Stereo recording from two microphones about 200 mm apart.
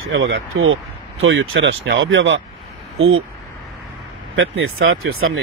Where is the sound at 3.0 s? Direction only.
90° right.